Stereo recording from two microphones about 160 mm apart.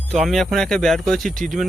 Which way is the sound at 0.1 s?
Centre (ahead or behind).